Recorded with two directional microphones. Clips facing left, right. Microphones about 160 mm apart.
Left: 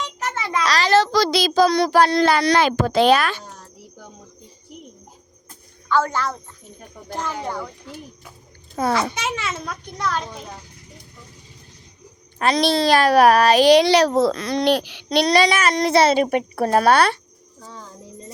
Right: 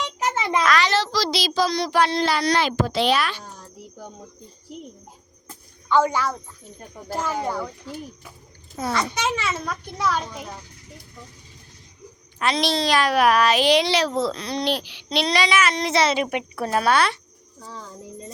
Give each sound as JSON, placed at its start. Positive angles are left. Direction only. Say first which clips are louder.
{"t": 0.2, "sound": "a sound", "louder": "right 3 dB", "side_deg": -15}
{"t": 0.6, "sound": "a sound", "louder": "left 5 dB", "side_deg": 35}
{"t": 2.0, "sound": "a child's voice", "louder": "left 4 dB", "side_deg": 50}
{"t": 2.6, "sound": "a child's voice", "louder": "left 5 dB", "side_deg": 50}
{"t": 5.9, "sound": "a woman's voice", "louder": "right 1 dB", "side_deg": -15}
{"t": 8.7, "sound": "a child's voice", "louder": "left 6 dB", "side_deg": 65}
{"t": 9.1, "sound": "speech", "louder": "right 2 dB", "side_deg": 5}
{"t": 12.4, "sound": "a woman's voice", "louder": "left 4 dB", "side_deg": 40}